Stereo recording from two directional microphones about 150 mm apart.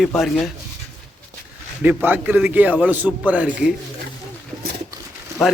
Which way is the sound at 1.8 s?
15° right (ahead or behind).